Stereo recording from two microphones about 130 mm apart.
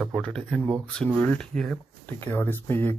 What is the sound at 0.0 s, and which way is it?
Speech, 5° left (ahead or behind).